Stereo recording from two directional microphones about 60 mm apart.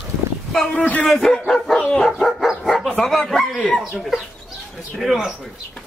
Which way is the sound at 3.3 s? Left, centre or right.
Centre.